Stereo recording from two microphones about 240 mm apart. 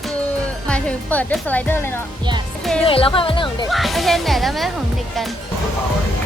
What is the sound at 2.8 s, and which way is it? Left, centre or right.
Speech, left.